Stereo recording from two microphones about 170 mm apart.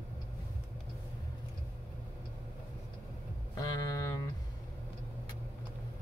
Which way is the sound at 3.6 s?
20° left (ahead or behind).